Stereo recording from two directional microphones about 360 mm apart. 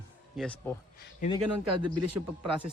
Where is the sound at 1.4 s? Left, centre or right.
Right.